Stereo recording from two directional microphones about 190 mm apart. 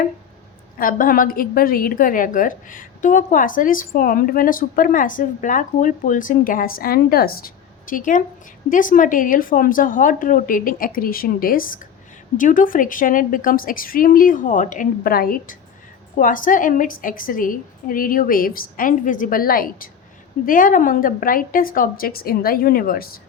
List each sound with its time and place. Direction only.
0.8 s a woman's voice: 50° left (ahead or behind)